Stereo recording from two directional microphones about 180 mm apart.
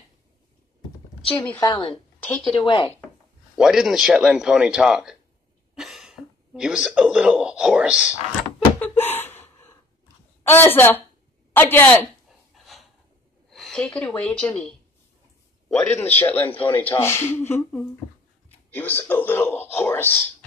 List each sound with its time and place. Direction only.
1.3 s a man's voice: 10° left (ahead or behind)
1.7 s speech: 30° left (ahead or behind)
2.2 s speech: 5° left (ahead or behind)
2.5 s speech: 25° left (ahead or behind)
3.5 s speech: 5° right (ahead or behind)
8.5 s a sound: 10° left (ahead or behind)
10.4 s a man's voice: 10° left (ahead or behind)
12.3 s a sound: centre (ahead or behind)
13.5 s a woman's voice: 5° left (ahead or behind)